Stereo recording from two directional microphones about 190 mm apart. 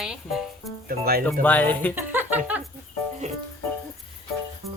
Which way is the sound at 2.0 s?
10° right (ahead or behind).